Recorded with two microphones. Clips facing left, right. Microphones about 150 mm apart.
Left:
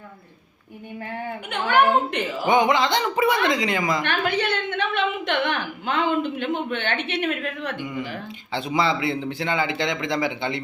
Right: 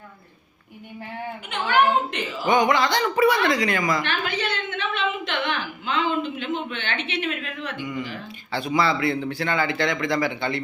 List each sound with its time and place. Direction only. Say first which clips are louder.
1.5 s a woman's voice: left 1 dB; 55° left (ahead or behind)
2.5 s speech: even; 20° left (ahead or behind)
4.0 s a sound: left 3 dB; 55° left (ahead or behind)
8.5 s speech: even; 20° left (ahead or behind)